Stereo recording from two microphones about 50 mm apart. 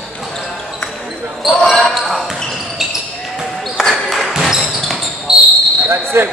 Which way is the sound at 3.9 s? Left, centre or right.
Centre.